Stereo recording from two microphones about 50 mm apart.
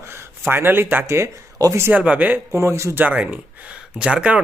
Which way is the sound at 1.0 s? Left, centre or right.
Right.